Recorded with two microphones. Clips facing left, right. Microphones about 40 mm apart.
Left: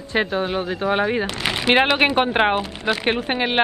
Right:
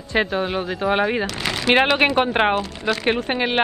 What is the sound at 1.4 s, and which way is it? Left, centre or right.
Speech, centre.